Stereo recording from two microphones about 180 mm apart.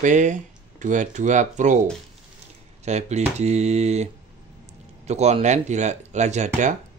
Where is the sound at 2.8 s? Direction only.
40° right (ahead or behind).